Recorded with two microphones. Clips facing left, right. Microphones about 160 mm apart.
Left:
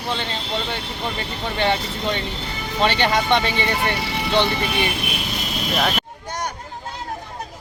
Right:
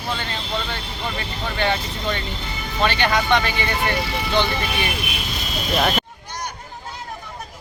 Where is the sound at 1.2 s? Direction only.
30° left (ahead or behind).